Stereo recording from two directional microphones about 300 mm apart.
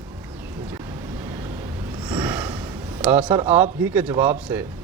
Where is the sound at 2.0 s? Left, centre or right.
Centre.